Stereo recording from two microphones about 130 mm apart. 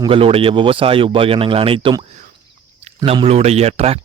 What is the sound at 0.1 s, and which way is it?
A man's voice, 45° right (ahead or behind).